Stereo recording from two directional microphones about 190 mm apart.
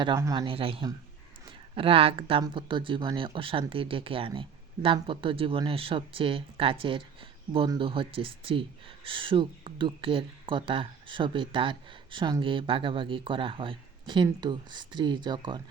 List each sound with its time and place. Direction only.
0.0 s speech: 20° right (ahead or behind)